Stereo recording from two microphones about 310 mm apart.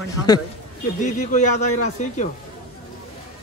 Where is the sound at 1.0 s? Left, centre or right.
Left.